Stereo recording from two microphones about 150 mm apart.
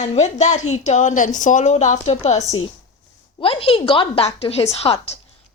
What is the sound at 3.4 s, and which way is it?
A woman's voice, 35° left (ahead or behind).